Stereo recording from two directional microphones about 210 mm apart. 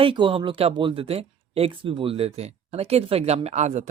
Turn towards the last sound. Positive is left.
turn(degrees=-35)  # may be behind; listen again after turning